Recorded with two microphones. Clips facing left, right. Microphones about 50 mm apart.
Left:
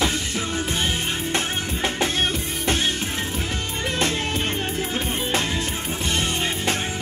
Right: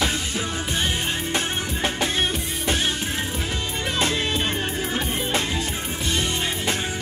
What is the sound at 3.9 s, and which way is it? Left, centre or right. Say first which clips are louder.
Music: right 1 dB; left.